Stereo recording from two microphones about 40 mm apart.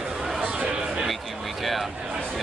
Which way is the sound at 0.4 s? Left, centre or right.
Right.